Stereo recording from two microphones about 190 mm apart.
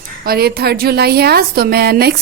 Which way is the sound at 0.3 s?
55° right (ahead or behind).